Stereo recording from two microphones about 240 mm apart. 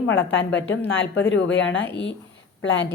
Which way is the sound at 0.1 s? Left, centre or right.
Left.